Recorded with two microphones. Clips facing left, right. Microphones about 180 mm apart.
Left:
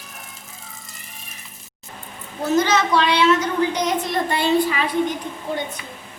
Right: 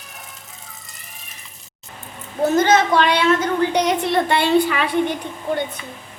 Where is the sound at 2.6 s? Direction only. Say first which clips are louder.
Right 2 dB; 50° right (ahead or behind); by 5.1 s 70° right (ahead or behind).